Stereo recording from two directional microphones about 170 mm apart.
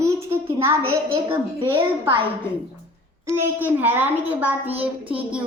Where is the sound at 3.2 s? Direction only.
10° right (ahead or behind).